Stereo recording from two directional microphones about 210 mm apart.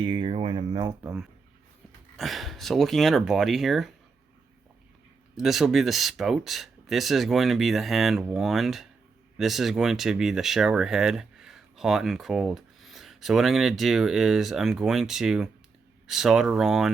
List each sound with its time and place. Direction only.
0.0 s speech: 25° right (ahead or behind)
2.1 s speech: centre (ahead or behind)
5.4 s speech: centre (ahead or behind)